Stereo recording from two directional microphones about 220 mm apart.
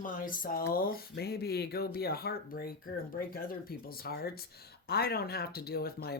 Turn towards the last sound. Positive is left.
turn(degrees=45)  # may be behind; listen again after turning